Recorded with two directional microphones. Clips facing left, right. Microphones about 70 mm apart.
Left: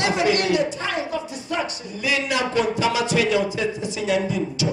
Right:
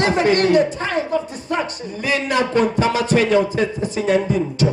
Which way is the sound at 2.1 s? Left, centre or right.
Right.